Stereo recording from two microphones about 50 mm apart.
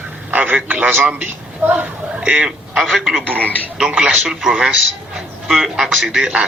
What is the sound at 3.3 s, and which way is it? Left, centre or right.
Speech, left.